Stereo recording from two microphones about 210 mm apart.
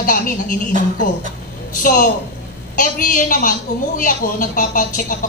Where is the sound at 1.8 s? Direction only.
40° left (ahead or behind).